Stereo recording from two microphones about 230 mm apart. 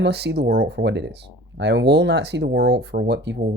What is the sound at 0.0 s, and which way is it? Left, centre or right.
Speech, right.